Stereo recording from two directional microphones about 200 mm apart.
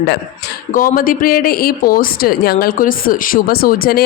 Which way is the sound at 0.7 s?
45° left (ahead or behind).